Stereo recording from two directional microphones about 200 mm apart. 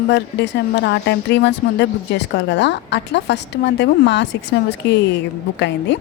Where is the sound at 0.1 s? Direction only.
60° left (ahead or behind).